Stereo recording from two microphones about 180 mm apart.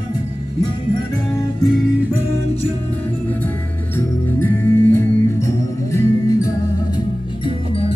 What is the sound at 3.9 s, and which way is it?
Music, 10° left (ahead or behind).